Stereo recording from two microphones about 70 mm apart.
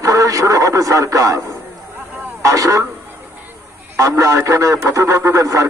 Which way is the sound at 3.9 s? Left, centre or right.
Right.